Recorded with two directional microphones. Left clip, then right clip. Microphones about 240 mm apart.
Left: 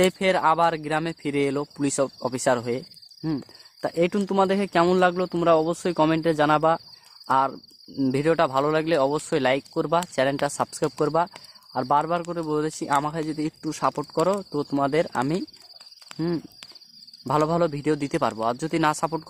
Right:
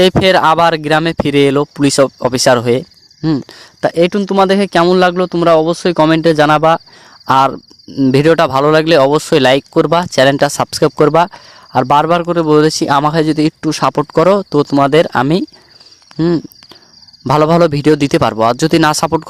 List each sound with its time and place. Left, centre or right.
0.0 s speech: right